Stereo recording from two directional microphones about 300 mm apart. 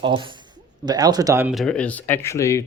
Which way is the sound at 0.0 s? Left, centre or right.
Centre.